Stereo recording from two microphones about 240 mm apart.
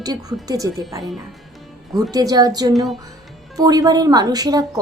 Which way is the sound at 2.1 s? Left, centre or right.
Centre.